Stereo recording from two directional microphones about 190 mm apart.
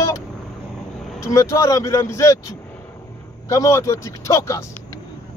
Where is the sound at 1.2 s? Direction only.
15° left (ahead or behind).